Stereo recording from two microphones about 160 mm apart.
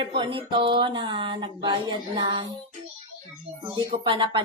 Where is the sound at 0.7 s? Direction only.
30° right (ahead or behind).